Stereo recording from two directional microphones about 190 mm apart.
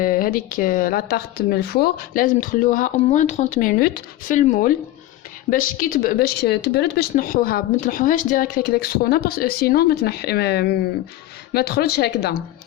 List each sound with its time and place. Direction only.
0.0 s speech: 45° left (ahead or behind)